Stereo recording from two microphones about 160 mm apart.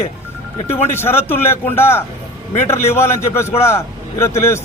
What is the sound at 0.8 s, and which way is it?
A man's voice, 15° left (ahead or behind).